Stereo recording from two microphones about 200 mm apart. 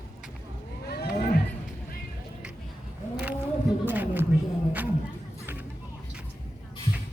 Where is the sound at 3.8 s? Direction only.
10° right (ahead or behind).